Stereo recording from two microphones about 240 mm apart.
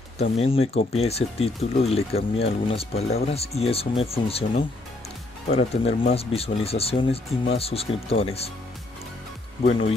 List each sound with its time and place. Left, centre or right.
0.2 s speech: left
9.7 s speech: left